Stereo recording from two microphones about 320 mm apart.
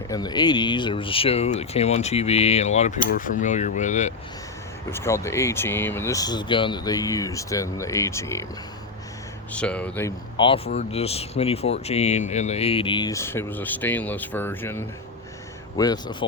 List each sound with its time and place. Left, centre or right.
0.1 s speech: centre
4.9 s speech: centre
9.5 s speech: centre